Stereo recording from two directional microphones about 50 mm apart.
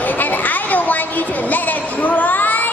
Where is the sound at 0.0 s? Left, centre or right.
Left.